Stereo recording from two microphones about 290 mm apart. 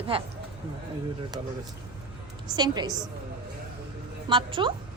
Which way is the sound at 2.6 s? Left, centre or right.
Centre.